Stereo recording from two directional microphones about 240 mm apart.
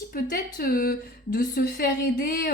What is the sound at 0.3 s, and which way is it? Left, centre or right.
Speech, left.